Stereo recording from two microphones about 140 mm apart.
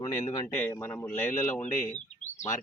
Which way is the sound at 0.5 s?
15° left (ahead or behind).